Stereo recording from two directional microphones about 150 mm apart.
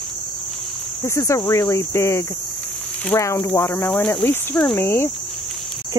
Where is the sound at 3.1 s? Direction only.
20° left (ahead or behind).